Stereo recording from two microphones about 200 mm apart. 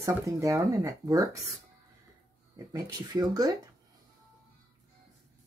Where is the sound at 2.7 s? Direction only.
20° right (ahead or behind).